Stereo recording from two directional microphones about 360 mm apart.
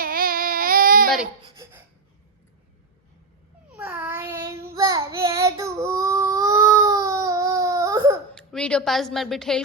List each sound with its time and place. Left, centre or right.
0.0 s baby cry: right
3.8 s child singing: centre
8.5 s a woman's voice: centre